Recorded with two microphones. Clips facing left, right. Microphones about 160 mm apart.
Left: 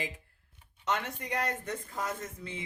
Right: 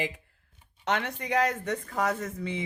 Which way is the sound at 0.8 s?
70° right (ahead or behind).